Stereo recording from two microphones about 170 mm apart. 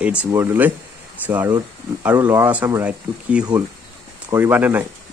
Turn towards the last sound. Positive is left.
turn(degrees=-10)  # may be behind; listen again after turning